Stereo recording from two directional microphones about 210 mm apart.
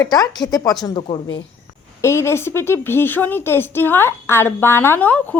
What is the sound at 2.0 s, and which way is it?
A woman's voice, 10° left (ahead or behind).